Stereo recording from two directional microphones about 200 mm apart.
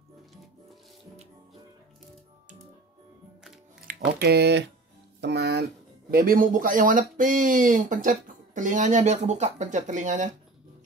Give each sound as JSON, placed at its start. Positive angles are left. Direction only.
{"t": 3.8, "sound": "speech", "side_deg": -50}